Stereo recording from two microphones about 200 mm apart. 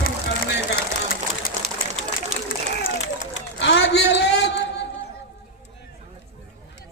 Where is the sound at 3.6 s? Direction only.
60° left (ahead or behind).